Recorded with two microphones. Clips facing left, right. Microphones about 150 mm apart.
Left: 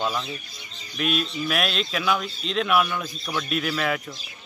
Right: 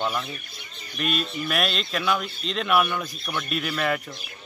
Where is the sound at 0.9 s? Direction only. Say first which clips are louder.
Left 2 dB; centre (ahead or behind).